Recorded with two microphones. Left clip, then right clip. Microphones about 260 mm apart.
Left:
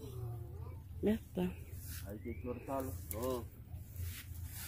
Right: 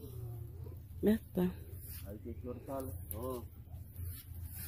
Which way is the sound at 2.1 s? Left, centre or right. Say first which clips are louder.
Left 2 dB; centre.